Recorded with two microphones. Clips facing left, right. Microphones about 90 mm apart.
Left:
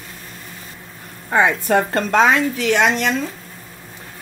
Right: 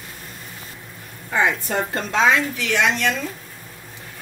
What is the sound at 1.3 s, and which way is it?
A woman's voice, 60° left (ahead or behind).